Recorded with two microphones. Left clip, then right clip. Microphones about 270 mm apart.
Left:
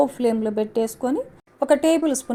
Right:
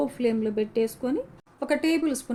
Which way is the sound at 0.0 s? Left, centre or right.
Left.